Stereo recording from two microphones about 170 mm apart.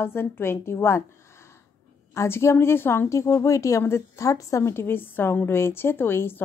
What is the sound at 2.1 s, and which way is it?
A woman's voice, 15° left (ahead or behind).